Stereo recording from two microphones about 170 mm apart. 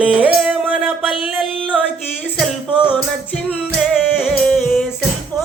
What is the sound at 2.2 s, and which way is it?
Music, centre (ahead or behind).